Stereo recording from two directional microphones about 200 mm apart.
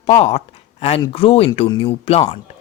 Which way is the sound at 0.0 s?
30° left (ahead or behind).